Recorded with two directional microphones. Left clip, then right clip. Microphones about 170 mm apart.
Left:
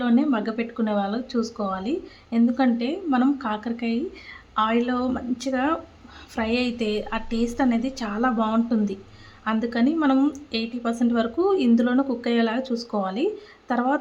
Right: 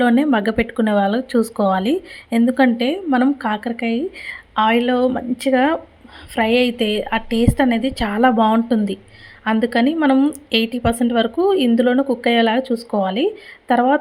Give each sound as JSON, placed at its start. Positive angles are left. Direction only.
{"t": 0.0, "sound": "a woman's voice", "side_deg": -30}
{"t": 10.5, "sound": "a woman's voice", "side_deg": -35}